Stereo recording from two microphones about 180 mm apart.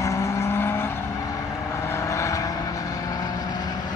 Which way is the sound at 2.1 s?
15° left (ahead or behind).